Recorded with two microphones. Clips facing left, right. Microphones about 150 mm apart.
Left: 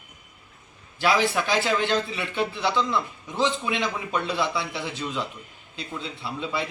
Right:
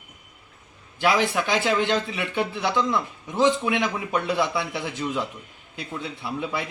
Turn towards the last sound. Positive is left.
turn(degrees=-15)  # may be behind; listen again after turning